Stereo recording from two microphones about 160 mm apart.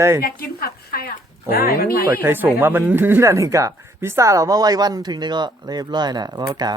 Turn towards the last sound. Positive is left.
turn(degrees=-25)  # may be behind; listen again after turning